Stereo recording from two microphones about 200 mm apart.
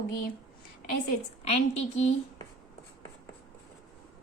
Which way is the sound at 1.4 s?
30° left (ahead or behind).